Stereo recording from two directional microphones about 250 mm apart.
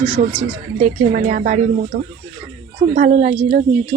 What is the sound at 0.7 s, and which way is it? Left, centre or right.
Speech, right.